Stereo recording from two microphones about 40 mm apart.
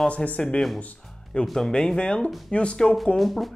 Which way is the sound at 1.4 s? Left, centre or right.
Centre.